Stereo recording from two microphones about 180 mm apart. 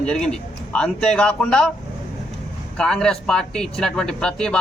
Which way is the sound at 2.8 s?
5° left (ahead or behind).